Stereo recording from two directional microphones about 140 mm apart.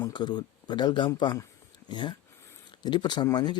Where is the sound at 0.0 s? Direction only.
30° left (ahead or behind).